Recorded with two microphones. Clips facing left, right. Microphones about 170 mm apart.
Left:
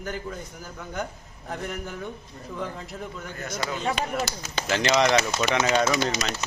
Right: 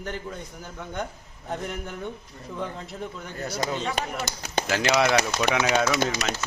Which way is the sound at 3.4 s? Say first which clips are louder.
Right 3 dB; 35° right (ahead or behind).